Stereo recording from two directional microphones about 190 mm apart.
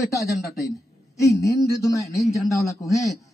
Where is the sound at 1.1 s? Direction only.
15° left (ahead or behind).